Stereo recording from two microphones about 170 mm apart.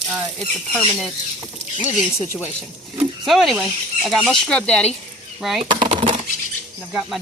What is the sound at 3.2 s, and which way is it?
Speech, centre (ahead or behind).